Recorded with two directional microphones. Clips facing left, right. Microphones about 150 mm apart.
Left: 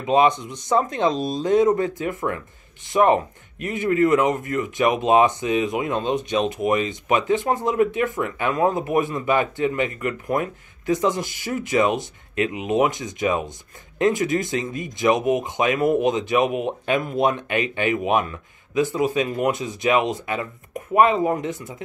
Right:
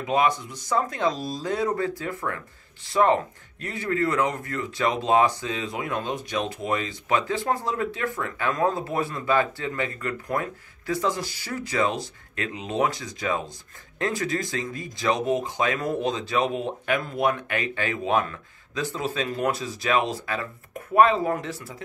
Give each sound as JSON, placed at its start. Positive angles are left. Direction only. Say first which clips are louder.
{"t": 0.0, "sound": "speech", "louder": "left 5 dB", "side_deg": 20}